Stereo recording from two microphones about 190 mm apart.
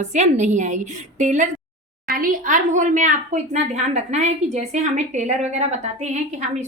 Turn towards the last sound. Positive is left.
turn(degrees=-35)  # may be behind; listen again after turning